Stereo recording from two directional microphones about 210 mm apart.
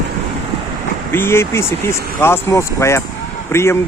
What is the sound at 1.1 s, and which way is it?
Speech, 10° left (ahead or behind).